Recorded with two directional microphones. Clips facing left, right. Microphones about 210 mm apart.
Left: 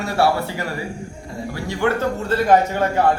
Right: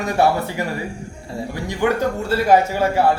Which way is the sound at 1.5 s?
15° right (ahead or behind).